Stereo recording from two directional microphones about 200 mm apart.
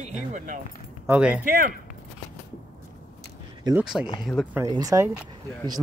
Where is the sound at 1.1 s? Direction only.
5° right (ahead or behind).